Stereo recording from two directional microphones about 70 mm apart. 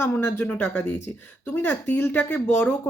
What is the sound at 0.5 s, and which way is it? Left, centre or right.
Speech, left.